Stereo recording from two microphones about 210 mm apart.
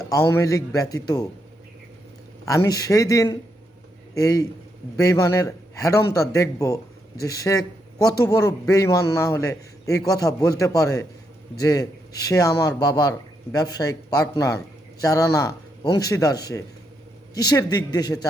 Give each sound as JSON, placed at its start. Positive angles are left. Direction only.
{"t": 0.0, "sound": "speech", "side_deg": 15}
{"t": 2.4, "sound": "speech", "side_deg": 15}